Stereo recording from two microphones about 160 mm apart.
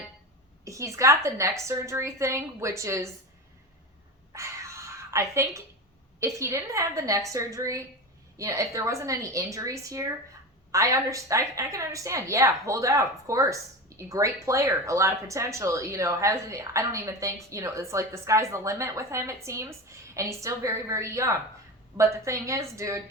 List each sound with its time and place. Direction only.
0.6 s a woman's voice: 20° right (ahead or behind)
4.3 s a sound: 20° right (ahead or behind)
6.1 s a woman's voice: 20° right (ahead or behind)